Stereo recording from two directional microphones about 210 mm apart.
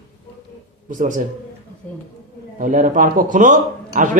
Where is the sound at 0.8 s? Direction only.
40° right (ahead or behind).